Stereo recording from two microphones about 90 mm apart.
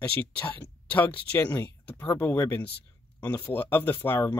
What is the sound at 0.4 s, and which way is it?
Speech, 15° left (ahead or behind).